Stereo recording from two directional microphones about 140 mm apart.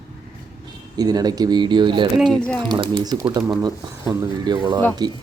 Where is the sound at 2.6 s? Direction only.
30° right (ahead or behind).